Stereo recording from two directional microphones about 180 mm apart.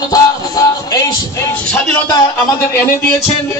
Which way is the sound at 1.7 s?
10° left (ahead or behind).